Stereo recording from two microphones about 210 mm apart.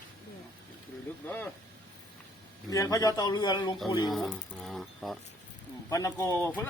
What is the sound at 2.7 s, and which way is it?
Speech, 15° left (ahead or behind).